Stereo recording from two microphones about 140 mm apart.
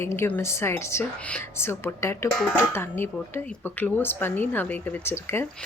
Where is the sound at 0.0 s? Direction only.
20° left (ahead or behind).